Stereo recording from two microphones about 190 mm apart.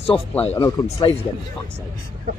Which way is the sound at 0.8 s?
20° left (ahead or behind).